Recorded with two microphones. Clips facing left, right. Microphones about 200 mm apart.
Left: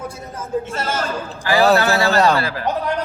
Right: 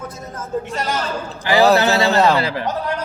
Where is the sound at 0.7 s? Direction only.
15° right (ahead or behind).